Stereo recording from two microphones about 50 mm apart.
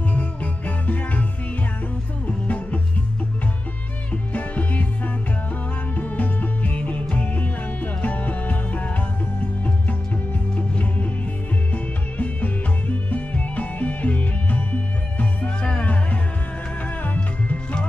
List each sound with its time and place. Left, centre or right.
0.1 s music: left
2.2 s music: left
4.1 s music: left
10.5 s music: left